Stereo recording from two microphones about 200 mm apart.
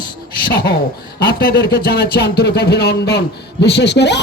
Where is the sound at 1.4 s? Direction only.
50° left (ahead or behind).